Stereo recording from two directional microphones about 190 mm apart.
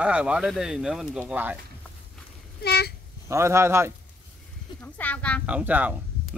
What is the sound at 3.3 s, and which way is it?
Speech, 15° right (ahead or behind).